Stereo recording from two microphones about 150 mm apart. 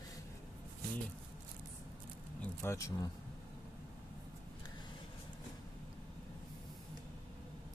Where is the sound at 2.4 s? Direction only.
15° left (ahead or behind).